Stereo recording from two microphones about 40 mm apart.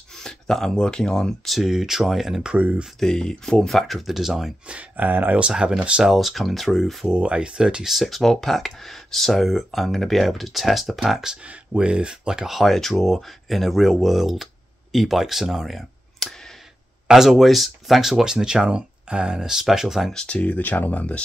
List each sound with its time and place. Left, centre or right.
0.1 s speech: centre
1.4 s speech: centre
3.0 s speech: centre
4.6 s speech: right
5.5 s speech: centre
6.0 s speech: centre
7.2 s speech: right
7.9 s speech: centre
11.4 s speech: right
12.4 s speech: centre
20.2 s speech: left